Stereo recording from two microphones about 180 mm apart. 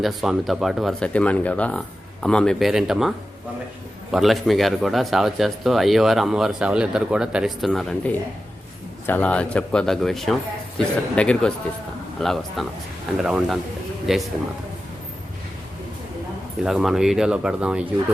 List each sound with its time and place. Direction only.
0.0 s speech: centre (ahead or behind)
16.6 s speech: centre (ahead or behind)